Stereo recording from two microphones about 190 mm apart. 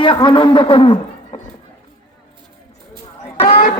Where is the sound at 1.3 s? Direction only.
35° left (ahead or behind).